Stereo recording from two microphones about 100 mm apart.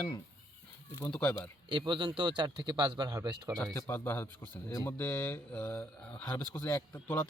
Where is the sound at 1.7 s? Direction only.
50° right (ahead or behind).